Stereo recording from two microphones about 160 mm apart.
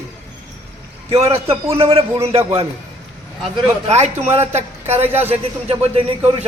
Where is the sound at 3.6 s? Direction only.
40° right (ahead or behind).